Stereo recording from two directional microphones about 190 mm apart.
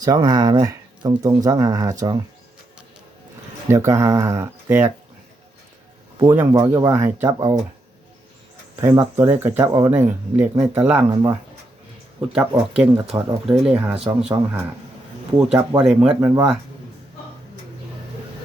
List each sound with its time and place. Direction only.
0.0 s speech: 20° right (ahead or behind)
3.7 s speech: 15° right (ahead or behind)
6.2 s speech: 10° right (ahead or behind)
8.7 s speech: 15° right (ahead or behind)
12.3 s speech: 5° right (ahead or behind)
16.2 s speech: 15° right (ahead or behind)